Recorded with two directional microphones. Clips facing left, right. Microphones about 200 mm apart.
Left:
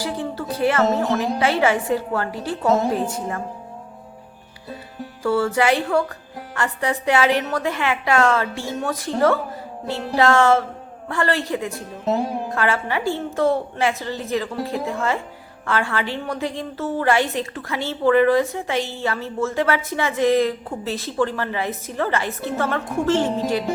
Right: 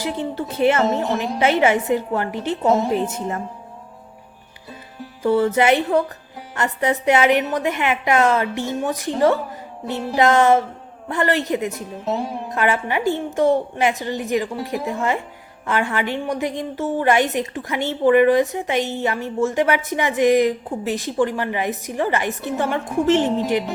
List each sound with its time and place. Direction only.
0.0 s a woman's voice: 20° right (ahead or behind)
5.2 s a woman's voice: 20° right (ahead or behind)
9.8 s music: centre (ahead or behind)
10.2 s a woman's voice: 20° right (ahead or behind)
12.0 s music: centre (ahead or behind)
12.5 s a woman's voice: 20° right (ahead or behind)